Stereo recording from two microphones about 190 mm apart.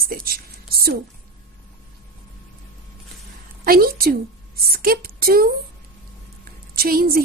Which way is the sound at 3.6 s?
50° right (ahead or behind).